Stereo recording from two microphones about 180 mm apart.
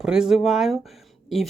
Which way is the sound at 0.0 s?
5° right (ahead or behind).